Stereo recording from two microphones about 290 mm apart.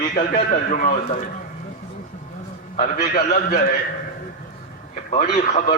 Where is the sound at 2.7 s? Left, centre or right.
Left.